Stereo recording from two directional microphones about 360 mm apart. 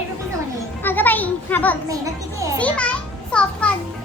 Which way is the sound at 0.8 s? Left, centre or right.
Centre.